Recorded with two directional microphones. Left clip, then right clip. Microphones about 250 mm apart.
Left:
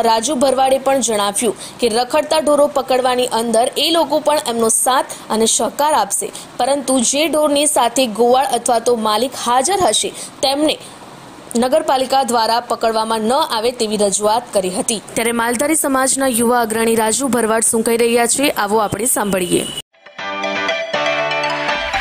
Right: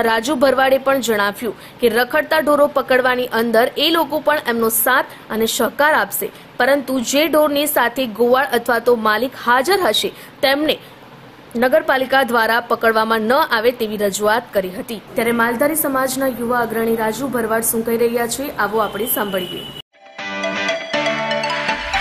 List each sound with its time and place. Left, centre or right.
0.0 s a woman's voice: centre
15.1 s a woman's voice: left
20.6 s music: centre